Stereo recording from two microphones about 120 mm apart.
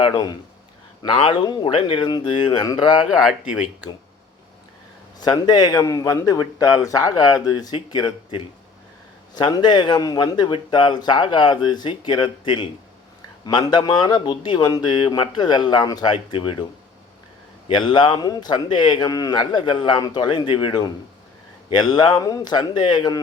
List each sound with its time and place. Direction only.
0.1 s a man's voice: 35° left (ahead or behind)
1.0 s speech: 45° left (ahead or behind)
3.1 s speech: 5° right (ahead or behind)
5.2 s a man's voice: 35° left (ahead or behind)
17.7 s a man's voice: 40° left (ahead or behind)